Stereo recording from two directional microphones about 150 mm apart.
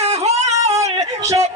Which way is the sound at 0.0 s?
45° right (ahead or behind).